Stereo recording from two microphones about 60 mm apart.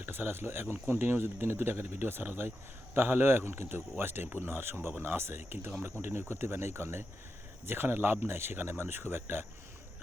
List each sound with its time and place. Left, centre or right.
0.0 s speech: right
5.1 s speech: right